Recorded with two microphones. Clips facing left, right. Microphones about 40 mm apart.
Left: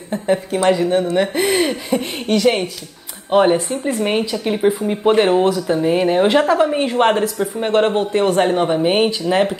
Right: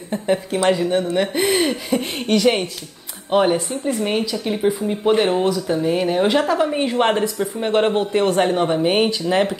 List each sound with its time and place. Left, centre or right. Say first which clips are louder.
0.1 s speech: left 2 dB; centre
3.3 s speech: left 3 dB; centre
3.5 s speech: left 2 dB; left
6.5 s a woman's voice: left 3 dB; centre